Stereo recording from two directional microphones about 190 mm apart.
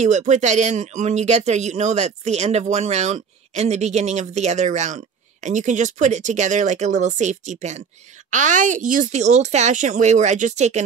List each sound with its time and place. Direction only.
0.0 s speech: 40° right (ahead or behind)